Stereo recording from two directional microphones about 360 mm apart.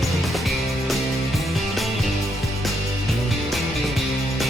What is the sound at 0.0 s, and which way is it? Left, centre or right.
Music, centre.